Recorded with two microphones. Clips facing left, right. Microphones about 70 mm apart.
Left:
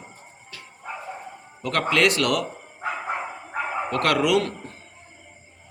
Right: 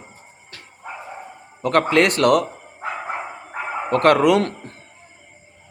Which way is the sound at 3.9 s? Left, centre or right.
Right.